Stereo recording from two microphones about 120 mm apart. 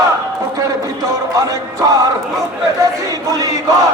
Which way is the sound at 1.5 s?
30° right (ahead or behind).